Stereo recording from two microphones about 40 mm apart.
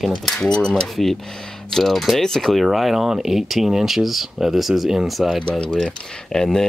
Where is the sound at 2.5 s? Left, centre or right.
Centre.